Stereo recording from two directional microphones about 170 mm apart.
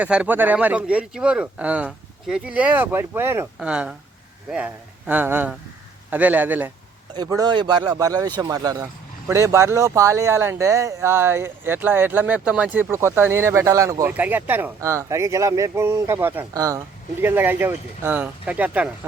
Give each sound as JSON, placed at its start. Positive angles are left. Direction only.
{"t": 0.0, "sound": "speech", "side_deg": -5}
{"t": 7.1, "sound": "a man's voice", "side_deg": -20}